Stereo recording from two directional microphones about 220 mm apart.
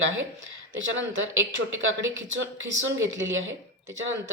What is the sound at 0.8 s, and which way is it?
Speech, 60° right (ahead or behind).